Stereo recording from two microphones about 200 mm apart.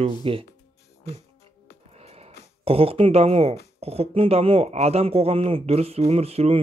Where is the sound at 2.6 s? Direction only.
30° right (ahead or behind).